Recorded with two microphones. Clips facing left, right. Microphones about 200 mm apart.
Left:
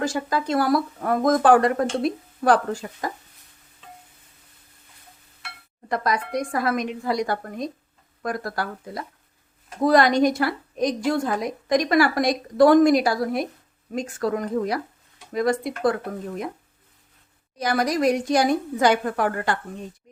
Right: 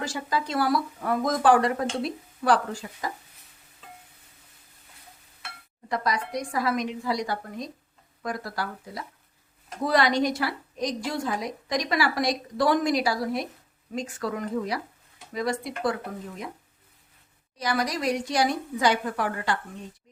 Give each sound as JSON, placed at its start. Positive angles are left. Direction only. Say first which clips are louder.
{"t": 0.0, "sound": "a woman's voice", "louder": "left 5 dB", "side_deg": 50}
{"t": 5.9, "sound": "a woman's voice", "louder": "left 4 dB", "side_deg": 55}
{"t": 17.6, "sound": "a woman's voice", "louder": "left 6 dB", "side_deg": 50}